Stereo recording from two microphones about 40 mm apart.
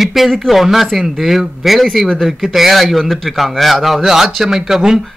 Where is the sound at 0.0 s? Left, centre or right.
Centre.